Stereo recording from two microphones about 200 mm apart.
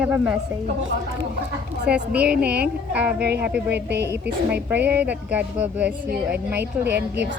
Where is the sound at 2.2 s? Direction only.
55° right (ahead or behind).